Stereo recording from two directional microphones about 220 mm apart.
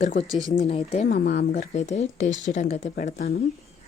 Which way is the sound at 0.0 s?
35° left (ahead or behind).